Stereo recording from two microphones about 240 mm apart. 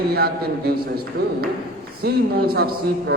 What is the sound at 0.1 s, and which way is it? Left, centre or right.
A man's voice, right.